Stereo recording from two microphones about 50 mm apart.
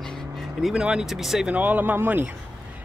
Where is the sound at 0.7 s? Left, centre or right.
Centre.